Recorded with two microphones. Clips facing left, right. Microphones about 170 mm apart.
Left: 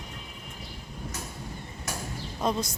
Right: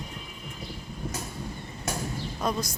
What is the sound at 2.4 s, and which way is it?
Speech, 25° left (ahead or behind).